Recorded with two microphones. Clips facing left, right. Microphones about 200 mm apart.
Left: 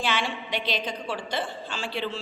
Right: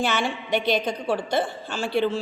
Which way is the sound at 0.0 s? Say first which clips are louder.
Right 4 dB; 50° right (ahead or behind).